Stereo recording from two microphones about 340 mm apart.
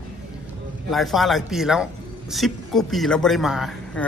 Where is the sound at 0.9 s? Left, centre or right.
Centre.